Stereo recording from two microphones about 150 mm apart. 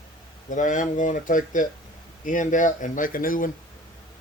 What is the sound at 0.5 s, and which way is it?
Speech, 60° left (ahead or behind).